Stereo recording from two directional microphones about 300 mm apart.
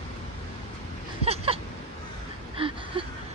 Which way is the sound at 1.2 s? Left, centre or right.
Centre.